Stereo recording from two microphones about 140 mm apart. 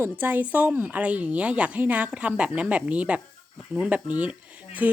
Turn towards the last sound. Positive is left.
turn(degrees=-10)  # may be behind; listen again after turning